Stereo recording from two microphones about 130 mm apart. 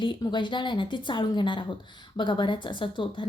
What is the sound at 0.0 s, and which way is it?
A woman's voice, 40° left (ahead or behind).